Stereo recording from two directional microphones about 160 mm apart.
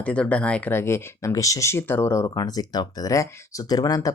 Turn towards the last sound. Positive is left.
turn(degrees=20)  # may be behind; listen again after turning